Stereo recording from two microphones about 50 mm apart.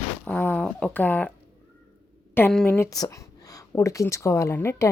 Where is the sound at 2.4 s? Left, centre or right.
Left.